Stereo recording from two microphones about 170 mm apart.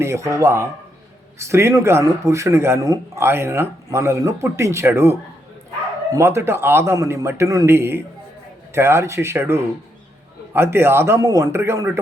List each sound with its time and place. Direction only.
0.0 s speech: 15° right (ahead or behind)
6.1 s speech: 15° right (ahead or behind)